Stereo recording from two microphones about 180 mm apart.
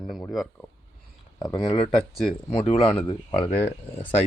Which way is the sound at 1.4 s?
25° left (ahead or behind).